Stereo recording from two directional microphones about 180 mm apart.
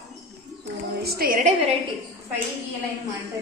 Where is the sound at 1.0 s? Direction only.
60° right (ahead or behind).